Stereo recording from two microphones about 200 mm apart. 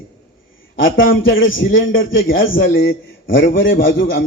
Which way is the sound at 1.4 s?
75° left (ahead or behind).